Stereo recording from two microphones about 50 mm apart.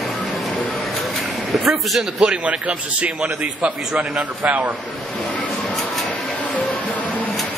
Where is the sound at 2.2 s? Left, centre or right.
Right.